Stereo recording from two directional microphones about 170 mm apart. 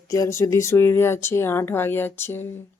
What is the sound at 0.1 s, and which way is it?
Speech, 15° left (ahead or behind).